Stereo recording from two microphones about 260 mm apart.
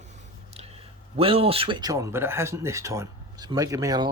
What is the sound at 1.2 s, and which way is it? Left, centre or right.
Speech, right.